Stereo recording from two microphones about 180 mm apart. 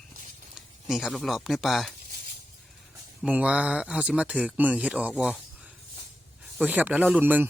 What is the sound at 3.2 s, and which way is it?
Speech, 5° right (ahead or behind).